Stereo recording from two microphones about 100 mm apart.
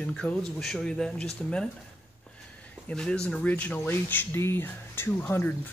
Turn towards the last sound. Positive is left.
turn(degrees=20)  # may be behind; listen again after turning